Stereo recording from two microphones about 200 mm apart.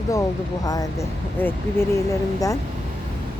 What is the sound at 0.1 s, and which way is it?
Speech, 15° left (ahead or behind).